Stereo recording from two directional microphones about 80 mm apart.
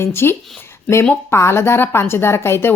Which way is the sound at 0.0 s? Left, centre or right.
Left.